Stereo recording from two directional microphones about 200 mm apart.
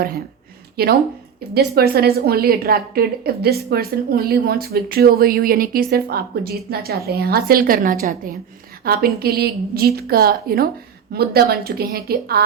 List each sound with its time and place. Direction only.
0.8 s a woman's voice: 50° right (ahead or behind)